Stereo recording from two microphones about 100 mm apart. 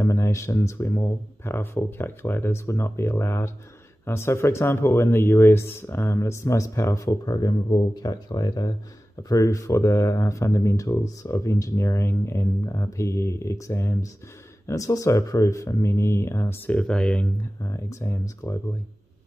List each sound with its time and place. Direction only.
0.0 s speech: 30° left (ahead or behind); by 17.3 s 10° left (ahead or behind)
17.4 s speech: 30° left (ahead or behind)